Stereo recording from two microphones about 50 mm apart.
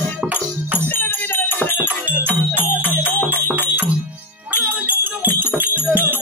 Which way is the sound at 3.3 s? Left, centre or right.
Right.